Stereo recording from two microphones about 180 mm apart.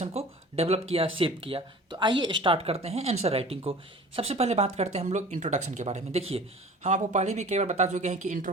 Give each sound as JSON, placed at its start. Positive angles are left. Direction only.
{"t": 0.0, "sound": "speech", "side_deg": -35}